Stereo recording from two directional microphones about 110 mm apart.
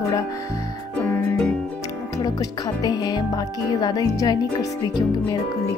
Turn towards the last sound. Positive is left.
turn(degrees=35)  # may be behind; listen again after turning